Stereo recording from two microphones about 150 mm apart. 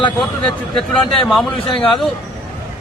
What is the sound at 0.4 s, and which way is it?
Speech, 35° left (ahead or behind).